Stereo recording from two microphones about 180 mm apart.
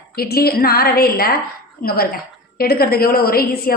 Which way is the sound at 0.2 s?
60° left (ahead or behind).